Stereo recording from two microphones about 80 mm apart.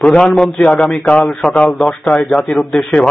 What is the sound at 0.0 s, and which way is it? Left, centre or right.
Speech, centre.